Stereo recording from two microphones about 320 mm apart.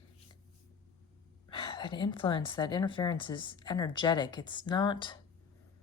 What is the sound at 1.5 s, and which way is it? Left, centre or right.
A woman's voice, centre.